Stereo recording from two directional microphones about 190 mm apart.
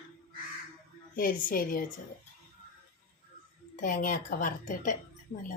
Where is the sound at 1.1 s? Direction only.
50° left (ahead or behind).